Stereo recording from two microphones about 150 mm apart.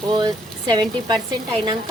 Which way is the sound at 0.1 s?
30° right (ahead or behind).